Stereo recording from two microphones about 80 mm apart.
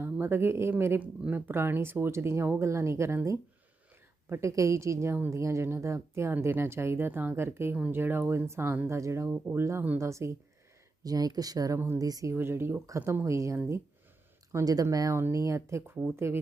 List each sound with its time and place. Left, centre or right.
0.0 s speech: right
4.3 s speech: right
11.0 s speech: right
12.3 s speech: right
13.2 s speech: right
15.1 s speech: right